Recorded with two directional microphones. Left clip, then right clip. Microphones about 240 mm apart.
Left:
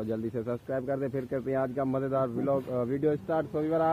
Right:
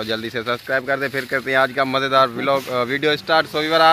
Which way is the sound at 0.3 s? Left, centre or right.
Centre.